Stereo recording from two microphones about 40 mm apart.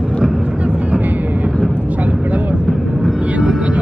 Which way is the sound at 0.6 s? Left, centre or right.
Right.